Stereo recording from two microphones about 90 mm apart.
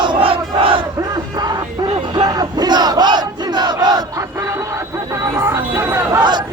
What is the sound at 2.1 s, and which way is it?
Crowd, 45° right (ahead or behind).